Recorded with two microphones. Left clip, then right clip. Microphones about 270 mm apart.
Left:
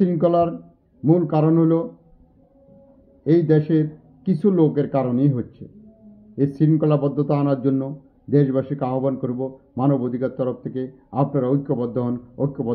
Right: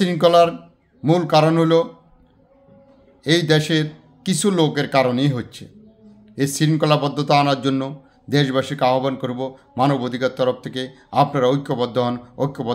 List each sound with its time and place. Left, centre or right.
0.0 s speech: centre
3.3 s speech: centre